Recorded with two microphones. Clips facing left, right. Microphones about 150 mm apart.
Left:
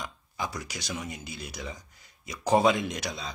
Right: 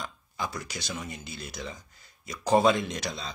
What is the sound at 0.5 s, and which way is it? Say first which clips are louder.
Speech: even; 15° left (ahead or behind).